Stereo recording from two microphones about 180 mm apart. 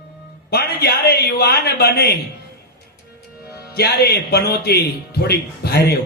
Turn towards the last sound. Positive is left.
turn(degrees=60)  # may be behind; listen again after turning